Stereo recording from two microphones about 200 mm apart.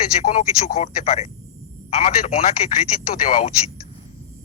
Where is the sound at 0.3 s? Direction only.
35° left (ahead or behind).